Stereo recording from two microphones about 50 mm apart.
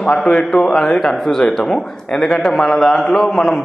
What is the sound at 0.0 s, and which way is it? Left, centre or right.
A man's voice, centre.